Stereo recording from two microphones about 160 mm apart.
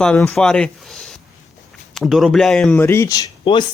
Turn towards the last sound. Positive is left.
turn(degrees=25)  # may be behind; listen again after turning